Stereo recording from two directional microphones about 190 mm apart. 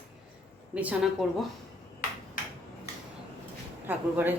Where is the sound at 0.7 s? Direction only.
5° right (ahead or behind).